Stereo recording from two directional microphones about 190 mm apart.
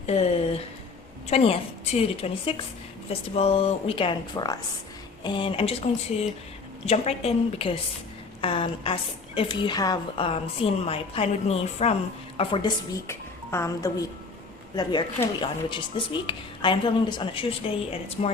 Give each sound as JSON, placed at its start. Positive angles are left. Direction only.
{"t": 0.0, "sound": "a woman's voice", "side_deg": 35}
{"t": 13.1, "sound": "a woman's voice", "side_deg": 15}